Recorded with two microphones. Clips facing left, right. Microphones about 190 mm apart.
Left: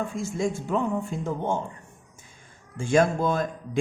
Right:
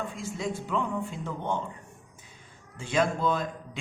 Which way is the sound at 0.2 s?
45° left (ahead or behind).